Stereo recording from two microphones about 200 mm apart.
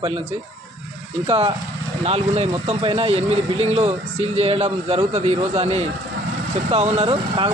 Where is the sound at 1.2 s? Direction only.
30° right (ahead or behind).